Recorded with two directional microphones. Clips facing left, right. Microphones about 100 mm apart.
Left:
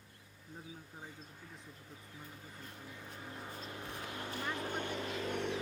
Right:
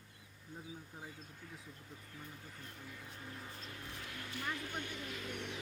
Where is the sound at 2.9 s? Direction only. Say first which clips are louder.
Left 2 dB; 15° left (ahead or behind).